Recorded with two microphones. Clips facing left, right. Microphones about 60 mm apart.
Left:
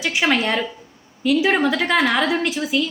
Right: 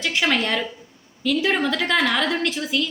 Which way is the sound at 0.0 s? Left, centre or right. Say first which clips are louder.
Left 2 dB; centre.